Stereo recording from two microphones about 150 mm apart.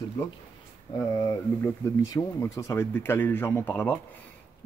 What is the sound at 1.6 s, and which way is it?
Speech, 15° left (ahead or behind).